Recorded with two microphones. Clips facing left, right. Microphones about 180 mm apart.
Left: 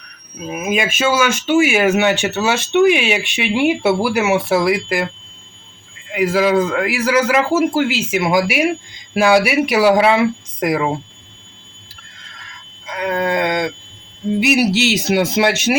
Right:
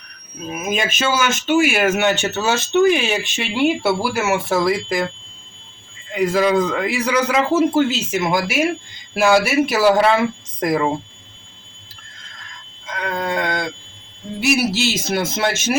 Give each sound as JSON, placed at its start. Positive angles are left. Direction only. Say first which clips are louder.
{"t": 0.6, "sound": "speech", "louder": "left 3 dB", "side_deg": 10}
{"t": 6.1, "sound": "a man's voice", "louder": "left 1 dB", "side_deg": 5}
{"t": 12.8, "sound": "a sound", "louder": "left 5 dB", "side_deg": 10}
{"t": 14.9, "sound": "speech", "louder": "left 6 dB", "side_deg": 15}